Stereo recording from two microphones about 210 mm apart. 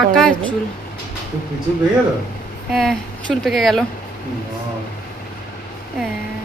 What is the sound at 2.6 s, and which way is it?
Speech, centre (ahead or behind).